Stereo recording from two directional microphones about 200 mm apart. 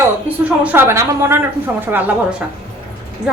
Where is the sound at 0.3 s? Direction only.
5° right (ahead or behind).